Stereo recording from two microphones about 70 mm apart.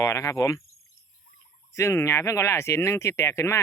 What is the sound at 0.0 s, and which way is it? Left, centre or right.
Speech, left.